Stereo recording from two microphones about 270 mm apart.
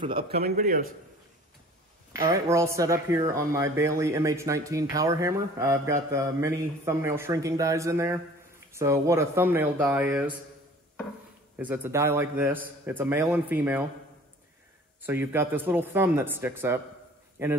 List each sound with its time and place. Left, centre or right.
0.3 s a man's voice: right
2.1 s a man's voice: centre
11.5 s a man's voice: centre
15.0 s a man's voice: centre